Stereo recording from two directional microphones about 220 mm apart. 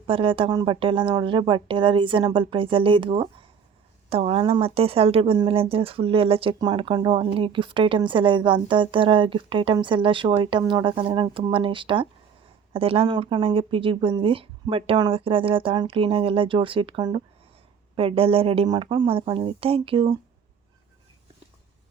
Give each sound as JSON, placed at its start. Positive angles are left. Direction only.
{"t": 0.1, "sound": "speech", "side_deg": -25}